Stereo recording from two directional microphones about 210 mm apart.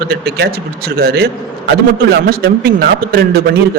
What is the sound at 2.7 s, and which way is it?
Speech, 45° right (ahead or behind).